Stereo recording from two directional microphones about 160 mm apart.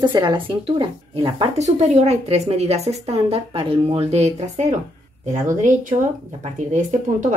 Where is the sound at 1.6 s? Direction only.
45° right (ahead or behind).